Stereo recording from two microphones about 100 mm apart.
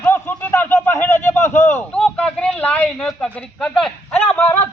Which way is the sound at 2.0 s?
10° left (ahead or behind).